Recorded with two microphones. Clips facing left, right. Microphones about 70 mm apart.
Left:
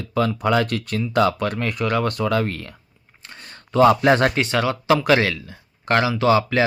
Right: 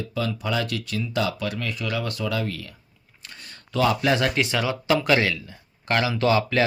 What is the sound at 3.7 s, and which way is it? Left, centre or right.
Speech, left.